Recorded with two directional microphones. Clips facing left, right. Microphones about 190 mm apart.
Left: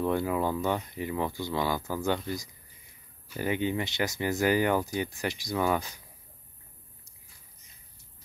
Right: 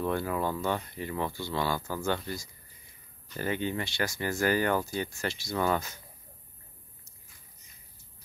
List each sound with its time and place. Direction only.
0.0 s speech: 15° left (ahead or behind)